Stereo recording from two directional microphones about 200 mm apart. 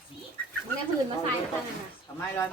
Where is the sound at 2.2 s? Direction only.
10° left (ahead or behind).